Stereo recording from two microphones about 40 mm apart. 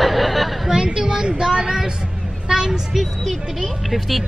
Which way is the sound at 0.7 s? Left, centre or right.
Centre.